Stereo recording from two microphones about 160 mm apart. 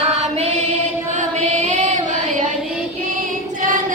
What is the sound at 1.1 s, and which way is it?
Chant, 50° right (ahead or behind).